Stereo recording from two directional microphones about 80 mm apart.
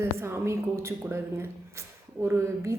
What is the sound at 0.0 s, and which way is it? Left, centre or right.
A woman's voice, right.